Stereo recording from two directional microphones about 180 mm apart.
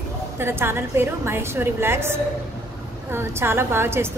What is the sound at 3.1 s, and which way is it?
Speech, 15° right (ahead or behind).